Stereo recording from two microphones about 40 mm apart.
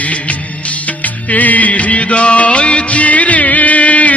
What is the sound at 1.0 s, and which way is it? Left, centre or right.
Music, left.